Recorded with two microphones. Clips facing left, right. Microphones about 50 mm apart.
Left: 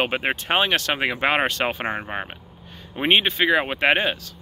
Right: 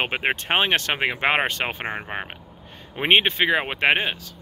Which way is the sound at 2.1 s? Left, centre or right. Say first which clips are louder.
Left 1 dB; centre.